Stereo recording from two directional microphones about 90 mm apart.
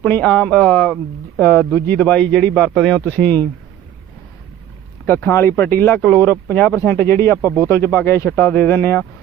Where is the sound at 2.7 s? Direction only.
5° left (ahead or behind).